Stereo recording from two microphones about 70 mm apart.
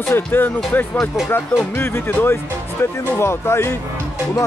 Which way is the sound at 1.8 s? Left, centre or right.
Left.